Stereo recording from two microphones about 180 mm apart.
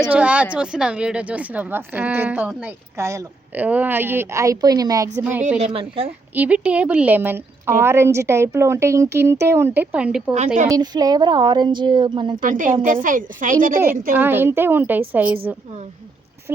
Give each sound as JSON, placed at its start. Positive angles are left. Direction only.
{"t": 0.1, "sound": "a woman's voice", "side_deg": -5}
{"t": 5.5, "sound": "a woman's voice", "side_deg": -35}
{"t": 6.3, "sound": "a woman's voice", "side_deg": -10}
{"t": 10.3, "sound": "a woman's voice", "side_deg": -40}
{"t": 10.7, "sound": "a woman's voice", "side_deg": -20}
{"t": 12.4, "sound": "a woman's voice", "side_deg": -50}
{"t": 14.1, "sound": "a woman's voice", "side_deg": -10}